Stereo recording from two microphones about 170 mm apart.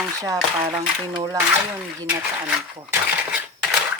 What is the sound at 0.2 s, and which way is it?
Speech, 20° right (ahead or behind).